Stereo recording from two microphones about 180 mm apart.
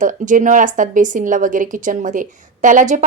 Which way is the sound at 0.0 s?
45° right (ahead or behind).